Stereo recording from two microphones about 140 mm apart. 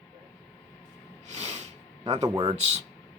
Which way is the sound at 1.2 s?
50° right (ahead or behind).